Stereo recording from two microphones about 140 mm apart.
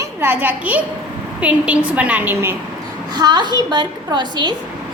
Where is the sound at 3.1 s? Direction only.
30° right (ahead or behind).